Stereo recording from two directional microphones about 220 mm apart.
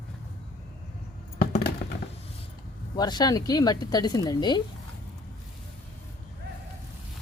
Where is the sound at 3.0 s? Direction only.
20° left (ahead or behind).